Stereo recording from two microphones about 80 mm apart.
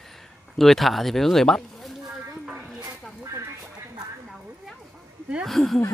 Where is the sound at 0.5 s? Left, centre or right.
Centre.